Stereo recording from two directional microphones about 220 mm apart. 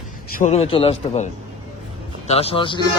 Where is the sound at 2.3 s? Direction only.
25° left (ahead or behind).